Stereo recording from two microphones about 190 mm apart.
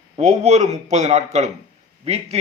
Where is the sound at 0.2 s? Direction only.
35° right (ahead or behind).